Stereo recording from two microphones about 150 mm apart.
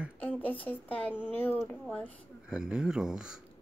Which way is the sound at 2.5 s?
5° right (ahead or behind).